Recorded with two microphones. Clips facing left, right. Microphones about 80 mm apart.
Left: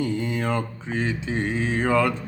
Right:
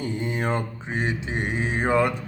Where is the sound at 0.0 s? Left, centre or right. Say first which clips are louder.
Left 2 dB; right.